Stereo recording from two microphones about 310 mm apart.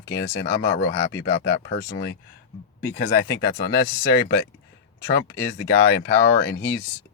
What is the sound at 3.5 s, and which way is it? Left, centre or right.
Speech, left.